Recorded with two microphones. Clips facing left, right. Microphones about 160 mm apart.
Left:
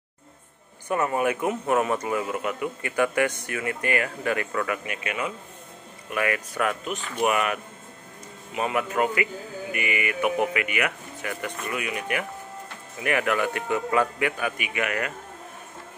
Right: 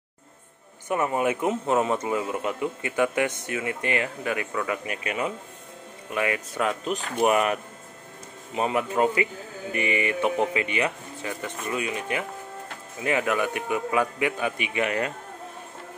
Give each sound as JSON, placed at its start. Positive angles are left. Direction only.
{"t": 0.8, "sound": "a man's voice", "side_deg": -20}
{"t": 4.8, "sound": "a man's voice", "side_deg": -35}
{"t": 6.0, "sound": "a man's voice", "side_deg": -25}